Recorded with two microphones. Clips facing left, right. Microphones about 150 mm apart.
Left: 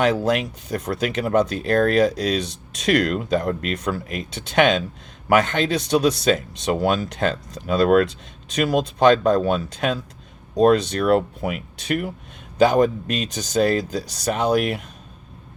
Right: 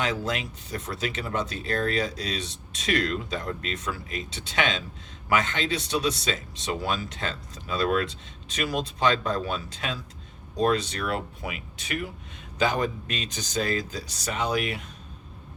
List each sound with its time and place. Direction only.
0.0 s speech: 55° left (ahead or behind)